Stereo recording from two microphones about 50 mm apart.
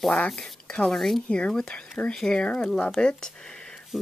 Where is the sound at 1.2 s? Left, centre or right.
Left.